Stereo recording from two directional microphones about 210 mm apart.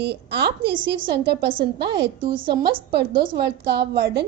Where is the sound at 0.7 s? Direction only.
20° right (ahead or behind).